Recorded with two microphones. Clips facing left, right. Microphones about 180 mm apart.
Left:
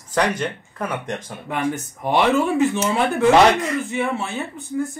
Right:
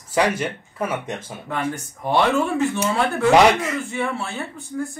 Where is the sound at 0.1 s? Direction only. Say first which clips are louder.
Right 1 dB; 5° right (ahead or behind).